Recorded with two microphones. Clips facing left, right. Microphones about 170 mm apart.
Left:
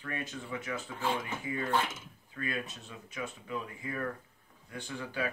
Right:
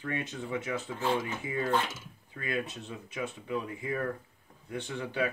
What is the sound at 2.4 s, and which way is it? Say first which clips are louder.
Speech: right 3 dB; 25° right (ahead or behind).